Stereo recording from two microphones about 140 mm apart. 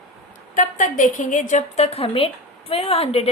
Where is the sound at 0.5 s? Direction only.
70° left (ahead or behind); by 3.3 s 45° left (ahead or behind).